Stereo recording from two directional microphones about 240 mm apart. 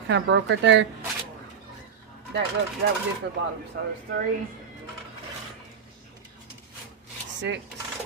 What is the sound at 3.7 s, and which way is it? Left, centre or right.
Speech, right.